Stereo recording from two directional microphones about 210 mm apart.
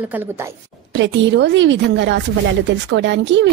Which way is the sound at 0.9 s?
60° right (ahead or behind).